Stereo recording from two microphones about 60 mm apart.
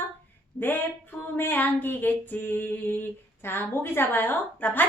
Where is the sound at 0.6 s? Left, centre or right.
Left.